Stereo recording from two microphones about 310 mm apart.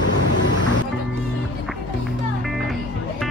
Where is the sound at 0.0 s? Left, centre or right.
Left.